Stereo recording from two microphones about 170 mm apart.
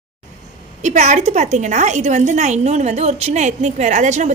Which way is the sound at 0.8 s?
45° right (ahead or behind).